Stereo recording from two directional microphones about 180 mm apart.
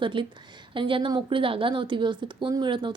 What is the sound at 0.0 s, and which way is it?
A woman's voice, 25° right (ahead or behind).